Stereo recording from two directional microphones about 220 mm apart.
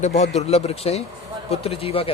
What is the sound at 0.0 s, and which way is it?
Speech, 30° left (ahead or behind).